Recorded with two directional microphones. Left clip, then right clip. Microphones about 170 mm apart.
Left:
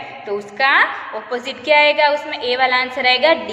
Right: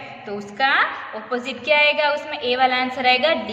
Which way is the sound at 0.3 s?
15° right (ahead or behind).